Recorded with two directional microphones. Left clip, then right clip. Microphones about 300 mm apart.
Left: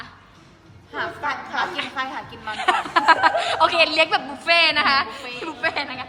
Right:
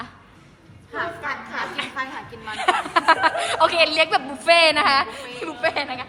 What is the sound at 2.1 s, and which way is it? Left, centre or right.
A woman's voice, centre.